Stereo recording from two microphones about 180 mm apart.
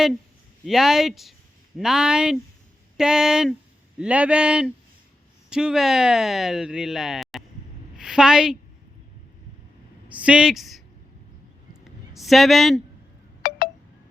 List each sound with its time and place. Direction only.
0.6 s a woman's voice: centre (ahead or behind)
10.2 s speech: 5° right (ahead or behind)
12.1 s speech: centre (ahead or behind)
13.4 s a sound: 50° left (ahead or behind)